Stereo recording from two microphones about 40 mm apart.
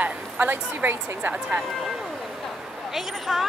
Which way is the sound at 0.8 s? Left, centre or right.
Right.